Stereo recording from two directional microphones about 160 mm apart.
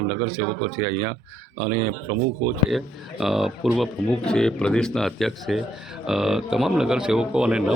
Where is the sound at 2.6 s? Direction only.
Centre (ahead or behind).